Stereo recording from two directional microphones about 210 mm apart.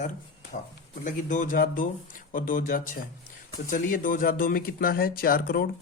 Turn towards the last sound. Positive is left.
turn(degrees=45)  # may be behind; listen again after turning